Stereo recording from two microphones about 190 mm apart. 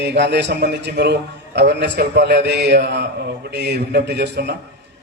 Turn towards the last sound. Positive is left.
turn(degrees=-60)  # may be behind; listen again after turning